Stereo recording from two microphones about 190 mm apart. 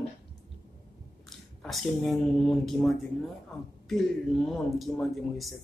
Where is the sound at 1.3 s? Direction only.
Centre (ahead or behind).